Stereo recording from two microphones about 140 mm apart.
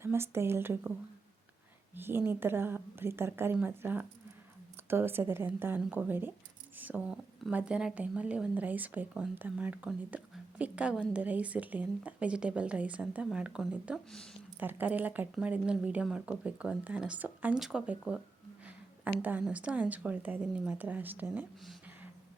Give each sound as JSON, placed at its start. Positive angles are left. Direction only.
{"t": 0.0, "sound": "speech", "side_deg": -15}
{"t": 2.0, "sound": "speech", "side_deg": -15}
{"t": 14.6, "sound": "speech", "side_deg": -15}
{"t": 19.2, "sound": "speech", "side_deg": -10}